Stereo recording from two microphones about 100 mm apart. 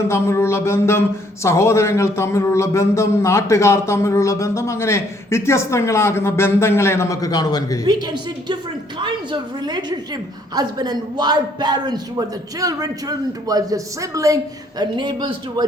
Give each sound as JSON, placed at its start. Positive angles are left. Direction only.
{"t": 0.1, "sound": "speech", "side_deg": 25}
{"t": 7.9, "sound": "a man's voice", "side_deg": -40}
{"t": 9.0, "sound": "a woman's voice", "side_deg": -55}
{"t": 14.8, "sound": "a woman's voice", "side_deg": -50}